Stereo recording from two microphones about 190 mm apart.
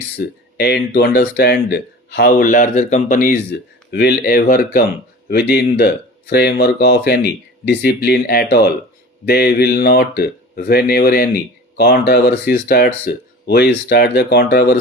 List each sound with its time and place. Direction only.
0.2 s speech: 55° left (ahead or behind)
3.9 s speech: 55° left (ahead or behind)